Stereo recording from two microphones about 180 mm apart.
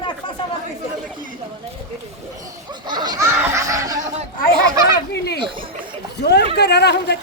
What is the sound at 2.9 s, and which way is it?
Laughter, 25° right (ahead or behind).